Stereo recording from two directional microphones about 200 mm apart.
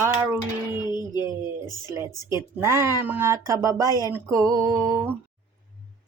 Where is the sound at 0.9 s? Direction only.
20° left (ahead or behind).